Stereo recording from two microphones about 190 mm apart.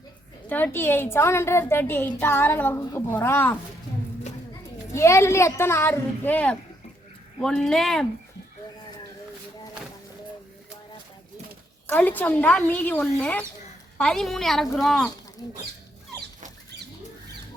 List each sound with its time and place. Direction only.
0.4 s a woman's voice: 10° left (ahead or behind)
4.9 s a woman's voice: 15° left (ahead or behind)
11.9 s a woman's voice: 10° left (ahead or behind)